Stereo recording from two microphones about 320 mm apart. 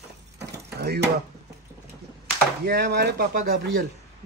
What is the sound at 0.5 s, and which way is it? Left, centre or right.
Mechanisms, right.